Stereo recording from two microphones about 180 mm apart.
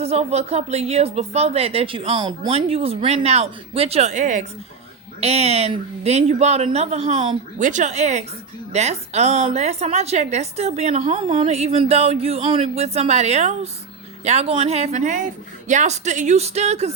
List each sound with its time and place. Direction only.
0.0 s a woman's voice: 35° right (ahead or behind)